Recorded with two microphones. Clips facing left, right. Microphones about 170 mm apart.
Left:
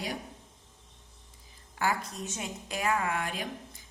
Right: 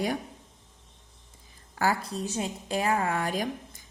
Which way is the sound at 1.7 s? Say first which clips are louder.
Right 4 dB; 35° right (ahead or behind).